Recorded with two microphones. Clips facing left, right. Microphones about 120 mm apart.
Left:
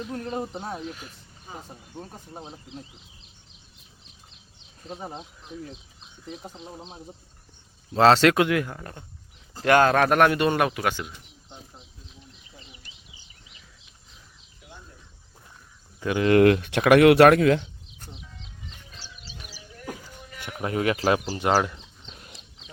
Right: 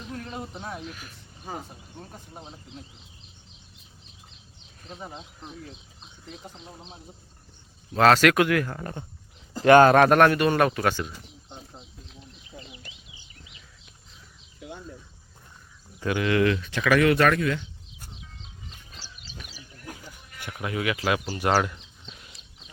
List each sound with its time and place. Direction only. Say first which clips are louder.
0.1 s speech: left 3 dB; 35° left (ahead or behind)
4.9 s speech: left 4 dB; 35° left (ahead or behind)
7.9 s speech: left 1 dB; 25° left (ahead or behind)
8.7 s speech: right 4 dB; 5° right (ahead or behind)
10.3 s speech: right 1 dB; 20° left (ahead or behind)
16.0 s speech: left 3 dB; 30° left (ahead or behind)
16.3 s speech: left 8 dB; 55° left (ahead or behind); by 17.7 s 75° left (ahead or behind)
20.4 s speech: left 4 dB; 35° left (ahead or behind)
21.4 s speech: even; 15° left (ahead or behind)